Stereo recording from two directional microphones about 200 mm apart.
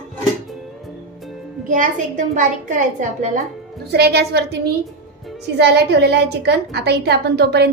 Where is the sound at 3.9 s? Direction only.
55° right (ahead or behind).